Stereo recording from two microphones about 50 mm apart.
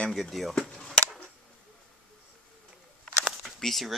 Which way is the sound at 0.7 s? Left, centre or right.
Centre.